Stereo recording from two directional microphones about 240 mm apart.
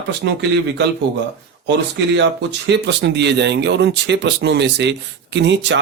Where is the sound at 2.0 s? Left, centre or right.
Right.